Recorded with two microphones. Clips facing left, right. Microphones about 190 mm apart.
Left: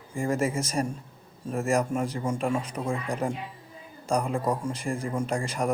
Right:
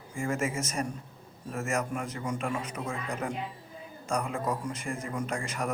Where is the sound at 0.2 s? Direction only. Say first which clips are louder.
Left 4 dB; 35° left (ahead or behind).